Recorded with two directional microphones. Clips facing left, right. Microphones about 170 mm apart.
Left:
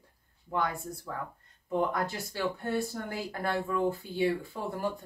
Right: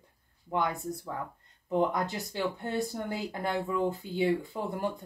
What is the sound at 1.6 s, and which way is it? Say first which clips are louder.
Speech: right 2 dB; 20° right (ahead or behind).